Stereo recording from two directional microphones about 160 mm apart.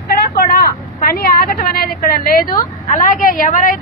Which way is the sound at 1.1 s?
70° left (ahead or behind).